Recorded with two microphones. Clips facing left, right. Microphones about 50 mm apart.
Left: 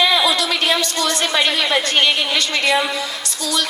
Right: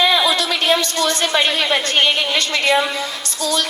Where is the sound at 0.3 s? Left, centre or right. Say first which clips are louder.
Right 1 dB; right.